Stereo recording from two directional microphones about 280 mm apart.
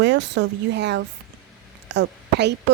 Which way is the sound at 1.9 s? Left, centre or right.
Right.